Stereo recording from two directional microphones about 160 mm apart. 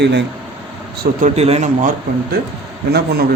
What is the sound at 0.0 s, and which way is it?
Speech, 90° right.